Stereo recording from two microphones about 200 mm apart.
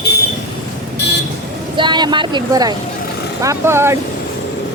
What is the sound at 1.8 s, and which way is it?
Speech, 20° right (ahead or behind).